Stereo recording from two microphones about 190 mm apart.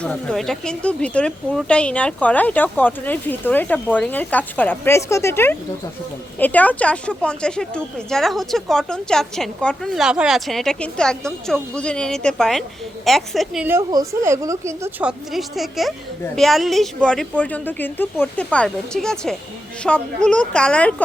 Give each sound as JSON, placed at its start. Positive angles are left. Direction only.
{"t": 0.0, "sound": "a woman's voice", "side_deg": 5}
{"t": 15.3, "sound": "speech", "side_deg": 0}